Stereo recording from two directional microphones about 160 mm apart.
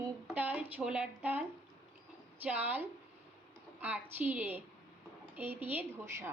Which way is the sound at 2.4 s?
10° right (ahead or behind).